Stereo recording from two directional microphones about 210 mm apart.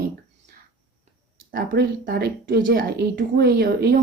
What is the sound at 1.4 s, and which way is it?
A woman's voice, 45° right (ahead or behind).